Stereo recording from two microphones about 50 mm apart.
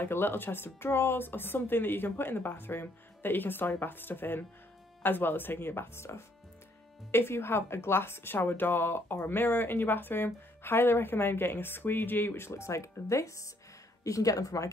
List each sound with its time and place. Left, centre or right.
0.0 s a woman's voice: left
12.4 s speech: left